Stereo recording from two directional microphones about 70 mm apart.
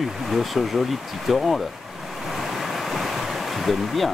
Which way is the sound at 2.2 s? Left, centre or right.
Centre.